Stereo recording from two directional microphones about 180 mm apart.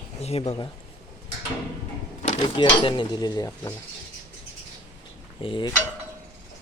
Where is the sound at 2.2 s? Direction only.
40° left (ahead or behind).